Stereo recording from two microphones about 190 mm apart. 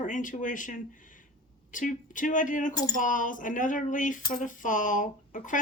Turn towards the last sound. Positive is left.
turn(degrees=45)  # may be behind; listen again after turning